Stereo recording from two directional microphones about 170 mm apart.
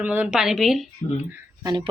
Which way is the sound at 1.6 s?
25° right (ahead or behind).